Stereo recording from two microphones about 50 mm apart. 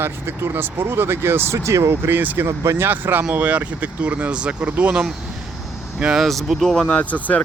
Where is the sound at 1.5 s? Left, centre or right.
Right.